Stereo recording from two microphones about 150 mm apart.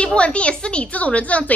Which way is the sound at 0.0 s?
5° left (ahead or behind).